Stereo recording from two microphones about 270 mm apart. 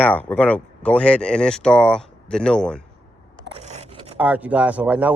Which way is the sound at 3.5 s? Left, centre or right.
Right.